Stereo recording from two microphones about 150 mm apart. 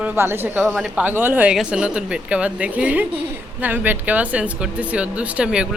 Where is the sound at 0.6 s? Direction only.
Centre (ahead or behind).